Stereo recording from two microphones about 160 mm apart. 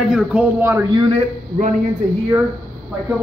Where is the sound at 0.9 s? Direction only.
30° right (ahead or behind).